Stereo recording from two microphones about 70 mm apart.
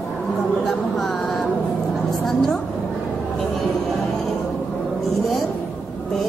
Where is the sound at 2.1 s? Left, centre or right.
Centre.